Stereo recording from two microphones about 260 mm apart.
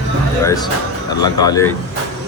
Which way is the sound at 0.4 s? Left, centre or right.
Centre.